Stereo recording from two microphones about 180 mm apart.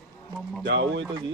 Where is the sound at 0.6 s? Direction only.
85° right.